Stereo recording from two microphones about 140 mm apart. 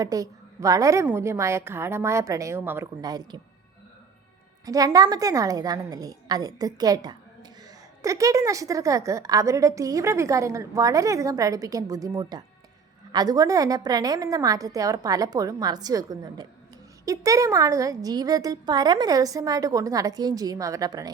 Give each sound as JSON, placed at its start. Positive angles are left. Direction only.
{"t": 0.0, "sound": "a woman's voice", "side_deg": -25}
{"t": 4.6, "sound": "a woman's voice", "side_deg": -25}